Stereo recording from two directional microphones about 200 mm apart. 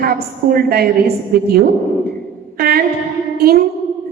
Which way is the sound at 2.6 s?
50° right (ahead or behind).